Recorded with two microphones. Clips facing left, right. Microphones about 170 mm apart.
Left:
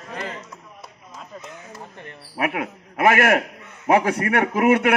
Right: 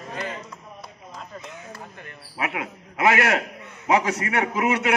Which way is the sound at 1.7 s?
30° left (ahead or behind).